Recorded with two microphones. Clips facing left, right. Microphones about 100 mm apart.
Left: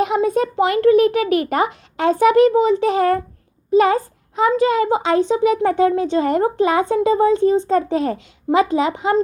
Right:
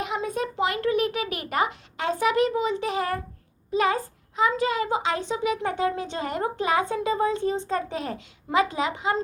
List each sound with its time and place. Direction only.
0.0 s a child's voice: 70° left (ahead or behind)
2.0 s a child's voice: 55° left (ahead or behind); by 4.5 s 40° left (ahead or behind)
4.5 s speech: 25° left (ahead or behind)
5.6 s a woman's voice: 45° left (ahead or behind); by 8.9 s 25° left (ahead or behind)